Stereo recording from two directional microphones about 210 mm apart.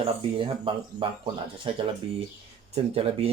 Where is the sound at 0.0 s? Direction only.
25° right (ahead or behind).